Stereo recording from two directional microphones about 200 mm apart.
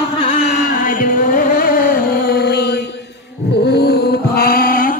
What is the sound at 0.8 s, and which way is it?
Chant, 40° left (ahead or behind).